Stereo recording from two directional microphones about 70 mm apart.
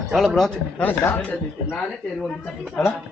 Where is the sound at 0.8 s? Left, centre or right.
Left.